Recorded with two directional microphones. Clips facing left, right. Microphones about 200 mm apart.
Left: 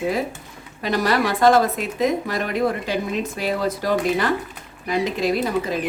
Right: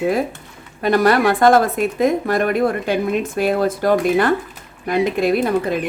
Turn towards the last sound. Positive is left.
turn(degrees=-55)  # may be behind; listen again after turning